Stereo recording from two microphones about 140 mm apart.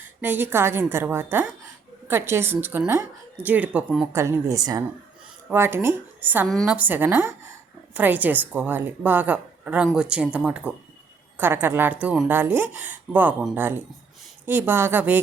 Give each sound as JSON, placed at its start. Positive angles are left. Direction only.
{"t": 0.2, "sound": "a woman's voice", "side_deg": -15}
{"t": 6.5, "sound": "a woman's voice", "side_deg": 5}
{"t": 6.7, "sound": "a woman's voice", "side_deg": -15}